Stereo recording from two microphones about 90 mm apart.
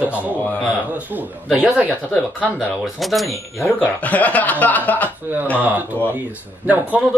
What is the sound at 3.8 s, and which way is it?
Speech, 15° left (ahead or behind).